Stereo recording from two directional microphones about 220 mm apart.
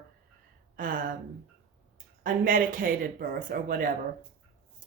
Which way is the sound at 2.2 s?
40° right (ahead or behind).